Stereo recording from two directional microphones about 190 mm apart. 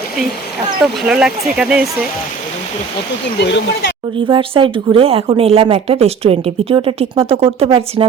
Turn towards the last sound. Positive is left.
turn(degrees=-30)  # may be behind; listen again after turning